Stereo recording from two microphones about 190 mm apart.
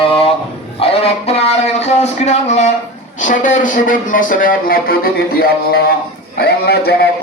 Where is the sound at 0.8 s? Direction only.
30° left (ahead or behind).